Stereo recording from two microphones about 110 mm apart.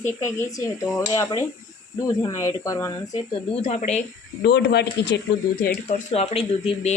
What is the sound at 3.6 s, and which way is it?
Speech, 80° left.